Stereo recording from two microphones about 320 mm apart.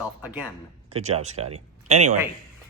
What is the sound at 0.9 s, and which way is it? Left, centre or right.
Speech, centre.